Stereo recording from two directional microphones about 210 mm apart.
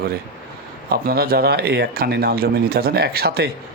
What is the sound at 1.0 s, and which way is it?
Speech, 45° right (ahead or behind).